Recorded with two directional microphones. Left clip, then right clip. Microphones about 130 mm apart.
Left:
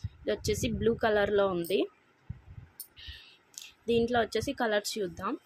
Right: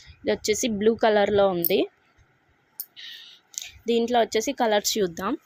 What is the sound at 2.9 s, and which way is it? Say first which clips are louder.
Clicking: right 8 dB; 25° right (ahead or behind).